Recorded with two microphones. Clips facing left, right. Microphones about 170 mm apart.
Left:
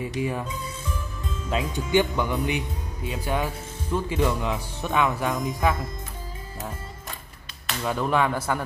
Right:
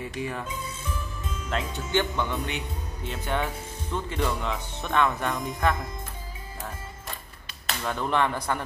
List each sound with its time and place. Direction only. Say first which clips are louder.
0.0 s a man's voice: left 4 dB; 15° left (ahead or behind)
1.5 s a man's voice: left 4 dB; 10° left (ahead or behind)
7.8 s a man's voice: left 3 dB; 5° left (ahead or behind)